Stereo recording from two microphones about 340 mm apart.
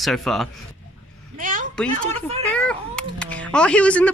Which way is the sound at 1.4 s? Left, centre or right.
Right.